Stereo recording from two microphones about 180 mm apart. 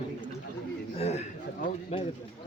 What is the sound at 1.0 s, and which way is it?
Speech, 35° left (ahead or behind).